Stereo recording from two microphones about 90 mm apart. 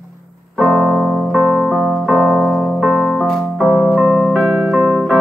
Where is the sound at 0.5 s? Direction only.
5° left (ahead or behind).